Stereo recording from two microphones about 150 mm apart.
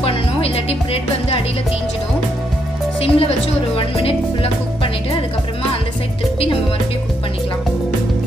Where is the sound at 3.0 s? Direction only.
40° left (ahead or behind).